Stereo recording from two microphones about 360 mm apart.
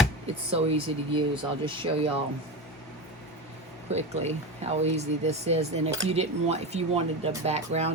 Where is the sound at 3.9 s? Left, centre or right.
Centre.